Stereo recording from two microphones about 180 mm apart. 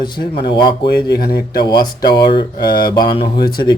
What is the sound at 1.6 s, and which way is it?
Speech, 25° left (ahead or behind).